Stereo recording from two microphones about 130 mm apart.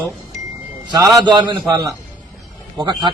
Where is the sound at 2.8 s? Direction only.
30° right (ahead or behind).